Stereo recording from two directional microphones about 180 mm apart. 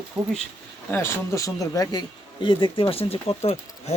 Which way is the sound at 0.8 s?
15° left (ahead or behind).